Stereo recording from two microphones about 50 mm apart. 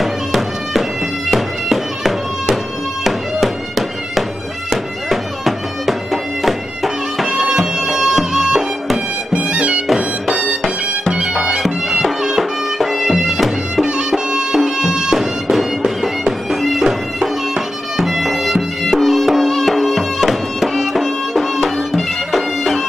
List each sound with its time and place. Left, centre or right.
0.0 s music: centre
9.3 s music: right
9.9 s music: centre
13.8 s music: centre
16.6 s bagpipes: centre